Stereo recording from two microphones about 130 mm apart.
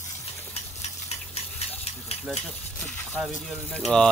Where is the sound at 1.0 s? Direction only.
55° left (ahead or behind).